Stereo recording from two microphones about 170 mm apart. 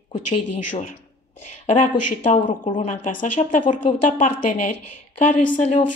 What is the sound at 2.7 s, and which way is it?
Speech, 45° left (ahead or behind).